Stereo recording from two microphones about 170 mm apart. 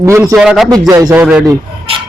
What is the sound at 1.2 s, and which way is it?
Speech, 10° right (ahead or behind).